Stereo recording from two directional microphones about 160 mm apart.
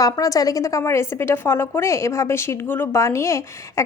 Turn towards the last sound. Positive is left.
turn(degrees=20)  # may be behind; listen again after turning